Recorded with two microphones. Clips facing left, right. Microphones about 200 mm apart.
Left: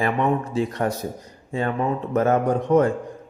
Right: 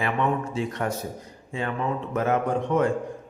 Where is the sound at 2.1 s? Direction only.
40° left (ahead or behind).